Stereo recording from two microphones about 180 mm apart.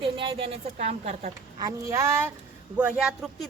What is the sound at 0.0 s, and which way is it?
Speech, 30° right (ahead or behind).